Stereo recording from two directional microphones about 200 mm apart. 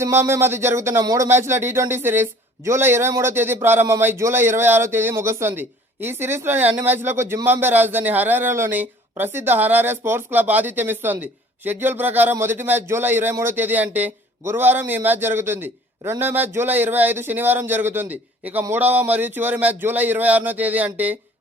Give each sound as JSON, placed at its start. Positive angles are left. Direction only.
{"t": 0.0, "sound": "a man's voice", "side_deg": -15}